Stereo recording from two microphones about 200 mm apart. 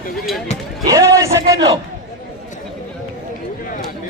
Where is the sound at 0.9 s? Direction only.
15° right (ahead or behind).